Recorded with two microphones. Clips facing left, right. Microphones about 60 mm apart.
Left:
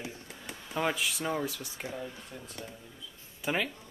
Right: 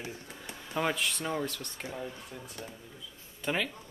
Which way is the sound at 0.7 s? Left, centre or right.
Centre.